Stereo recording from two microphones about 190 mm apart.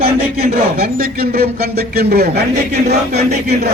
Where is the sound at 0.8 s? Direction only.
50° right (ahead or behind).